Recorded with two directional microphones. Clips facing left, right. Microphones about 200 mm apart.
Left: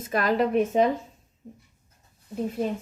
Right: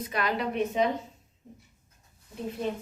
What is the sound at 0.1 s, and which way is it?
Speech, 45° left (ahead or behind).